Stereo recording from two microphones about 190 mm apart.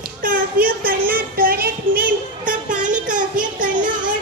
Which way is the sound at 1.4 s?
50° right (ahead or behind).